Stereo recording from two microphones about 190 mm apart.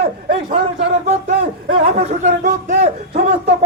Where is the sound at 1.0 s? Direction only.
35° right (ahead or behind).